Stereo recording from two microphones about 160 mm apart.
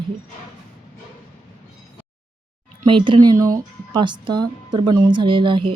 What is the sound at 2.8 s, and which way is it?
Speech, 30° right (ahead or behind).